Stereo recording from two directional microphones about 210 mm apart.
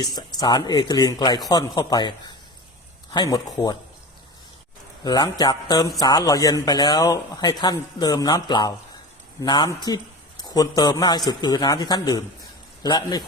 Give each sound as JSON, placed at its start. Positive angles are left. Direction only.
{"t": 0.0, "sound": "speech", "side_deg": 20}
{"t": 5.0, "sound": "speech", "side_deg": 20}